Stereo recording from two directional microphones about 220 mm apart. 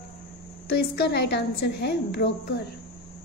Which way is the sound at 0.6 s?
45° left (ahead or behind).